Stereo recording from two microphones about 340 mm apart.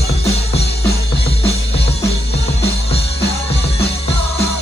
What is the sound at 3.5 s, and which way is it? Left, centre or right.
Music, centre.